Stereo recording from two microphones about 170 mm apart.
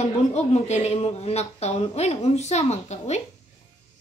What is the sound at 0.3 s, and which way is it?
Speech, 40° left (ahead or behind).